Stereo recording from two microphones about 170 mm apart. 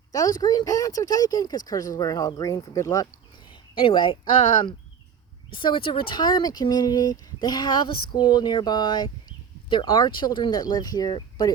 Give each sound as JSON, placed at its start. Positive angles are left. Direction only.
{"t": 0.1, "sound": "speech", "side_deg": 20}